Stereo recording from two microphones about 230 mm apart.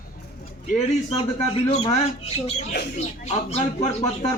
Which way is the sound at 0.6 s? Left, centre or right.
Left.